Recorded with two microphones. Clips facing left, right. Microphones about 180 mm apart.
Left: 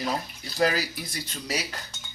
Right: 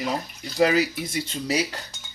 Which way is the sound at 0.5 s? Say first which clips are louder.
Right 5 dB; 20° right (ahead or behind).